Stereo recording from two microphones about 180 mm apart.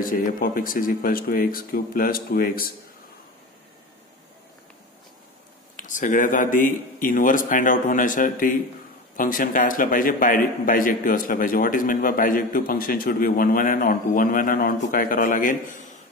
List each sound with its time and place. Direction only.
0.0 s a man's voice: 50° left (ahead or behind)
5.8 s a man's voice: 45° left (ahead or behind)